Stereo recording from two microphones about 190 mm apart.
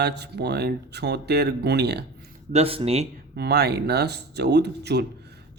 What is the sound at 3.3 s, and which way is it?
Speech, 60° right (ahead or behind).